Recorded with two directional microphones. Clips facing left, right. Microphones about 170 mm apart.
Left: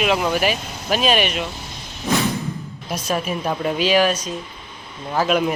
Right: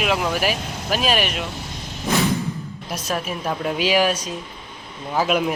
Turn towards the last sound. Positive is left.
turn(degrees=-5)  # may be behind; listen again after turning